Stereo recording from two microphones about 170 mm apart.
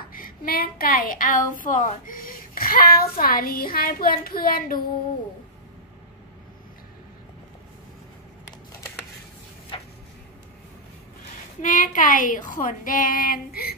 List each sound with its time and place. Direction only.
0.1 s speech: 55° left (ahead or behind)
9.7 s a sound: 30° left (ahead or behind)
11.6 s a woman's voice: 50° left (ahead or behind)